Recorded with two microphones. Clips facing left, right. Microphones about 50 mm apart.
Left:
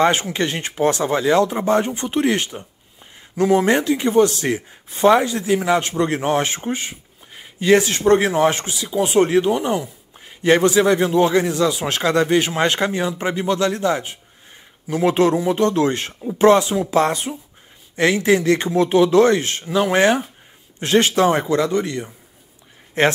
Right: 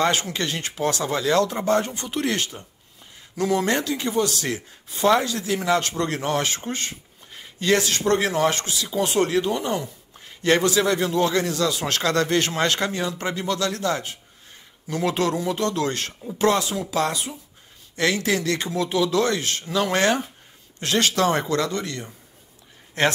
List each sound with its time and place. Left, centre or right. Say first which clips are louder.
0.0 s speech: left 5 dB; left
19.6 s speech: left 4 dB; centre